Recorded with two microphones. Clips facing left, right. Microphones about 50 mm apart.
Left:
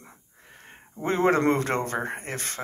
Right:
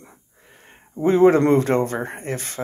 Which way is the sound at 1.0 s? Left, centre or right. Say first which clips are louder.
Right 7 dB; left.